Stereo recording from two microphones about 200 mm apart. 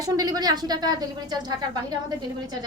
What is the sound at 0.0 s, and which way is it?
A woman's voice, 20° right (ahead or behind).